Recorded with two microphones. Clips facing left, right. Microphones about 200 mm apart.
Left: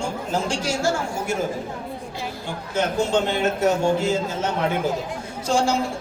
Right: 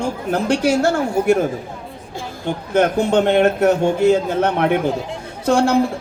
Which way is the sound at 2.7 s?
60° right (ahead or behind).